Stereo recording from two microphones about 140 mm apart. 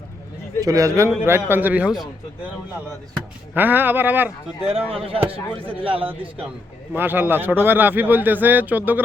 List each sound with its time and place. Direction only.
0.6 s a man's voice: 25° right (ahead or behind); by 2.0 s 5° right (ahead or behind)
3.5 s a man's voice: 15° right (ahead or behind)
4.7 s a man's voice: 40° right (ahead or behind)
6.9 s a man's voice: 15° right (ahead or behind)